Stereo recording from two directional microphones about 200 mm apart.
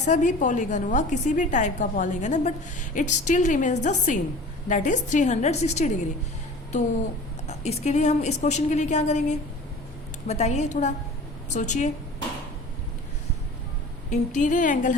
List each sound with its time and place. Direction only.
0.0 s a woman's voice: 40° left (ahead or behind)
7.4 s a woman's voice: 35° left (ahead or behind)
14.1 s a woman's voice: 35° left (ahead or behind)